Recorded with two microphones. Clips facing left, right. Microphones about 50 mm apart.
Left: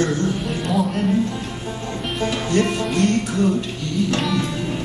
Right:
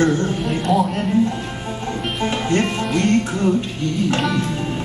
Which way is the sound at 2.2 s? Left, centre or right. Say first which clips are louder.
Even; right.